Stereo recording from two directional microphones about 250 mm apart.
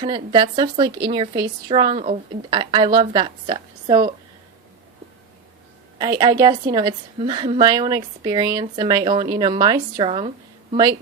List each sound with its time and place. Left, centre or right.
0.0 s speech: centre
6.0 s a woman's voice: centre